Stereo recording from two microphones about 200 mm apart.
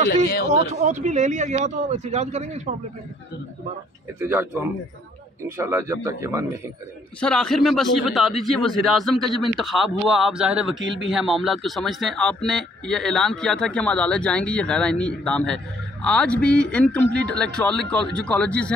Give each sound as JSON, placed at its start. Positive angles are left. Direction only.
{"t": 0.0, "sound": "speech", "side_deg": 50}
{"t": 0.5, "sound": "speech", "side_deg": -35}
{"t": 4.2, "sound": "speech", "side_deg": -10}
{"t": 7.2, "sound": "a man's voice", "side_deg": 5}
{"t": 10.8, "sound": "a man's voice", "side_deg": -65}
{"t": 11.1, "sound": "a man's voice", "side_deg": 0}